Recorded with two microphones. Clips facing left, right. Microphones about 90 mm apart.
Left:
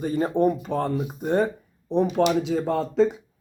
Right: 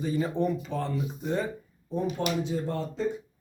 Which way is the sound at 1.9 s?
80° left.